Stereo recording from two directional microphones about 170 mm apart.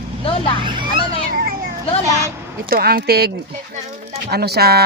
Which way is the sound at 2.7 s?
60° right (ahead or behind).